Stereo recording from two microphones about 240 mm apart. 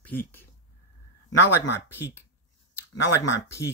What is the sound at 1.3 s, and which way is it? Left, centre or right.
Speech, left.